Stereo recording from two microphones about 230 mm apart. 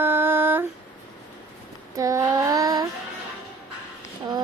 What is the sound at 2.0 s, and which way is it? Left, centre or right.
Child singing, centre.